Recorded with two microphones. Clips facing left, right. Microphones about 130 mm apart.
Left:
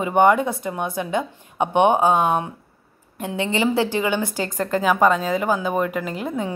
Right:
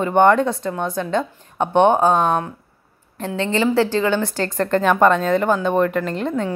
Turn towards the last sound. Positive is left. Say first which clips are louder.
# right 4 dB
turn(degrees=5)  # may be behind; listen again after turning